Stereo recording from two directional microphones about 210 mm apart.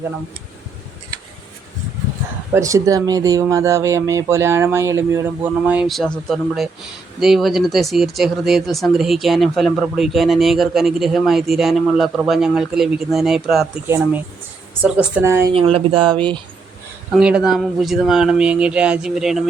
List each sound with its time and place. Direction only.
2.5 s speech: 15° right (ahead or behind)
13.8 s speech: 10° right (ahead or behind)
15.5 s speech: 25° right (ahead or behind)
17.1 s speech: 5° right (ahead or behind)